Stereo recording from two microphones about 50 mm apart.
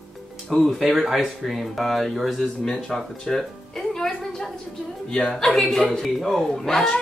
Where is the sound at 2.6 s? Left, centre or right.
Centre.